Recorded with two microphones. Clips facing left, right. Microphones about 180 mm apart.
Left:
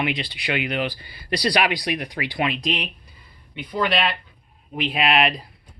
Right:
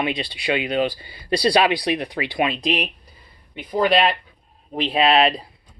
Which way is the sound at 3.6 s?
45° right (ahead or behind).